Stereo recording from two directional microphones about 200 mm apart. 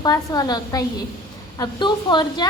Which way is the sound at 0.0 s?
20° left (ahead or behind).